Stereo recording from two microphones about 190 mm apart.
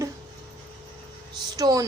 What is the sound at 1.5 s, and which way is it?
Speech, 20° right (ahead or behind).